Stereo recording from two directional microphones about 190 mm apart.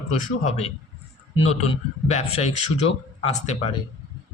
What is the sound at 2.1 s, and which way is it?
A man's voice, 35° left (ahead or behind).